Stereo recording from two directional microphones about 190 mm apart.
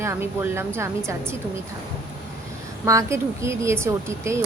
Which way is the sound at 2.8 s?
15° right (ahead or behind).